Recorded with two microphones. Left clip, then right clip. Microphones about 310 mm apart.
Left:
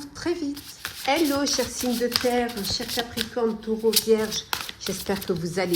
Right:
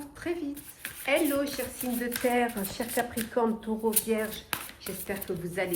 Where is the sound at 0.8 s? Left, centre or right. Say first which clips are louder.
Left 4 dB; centre.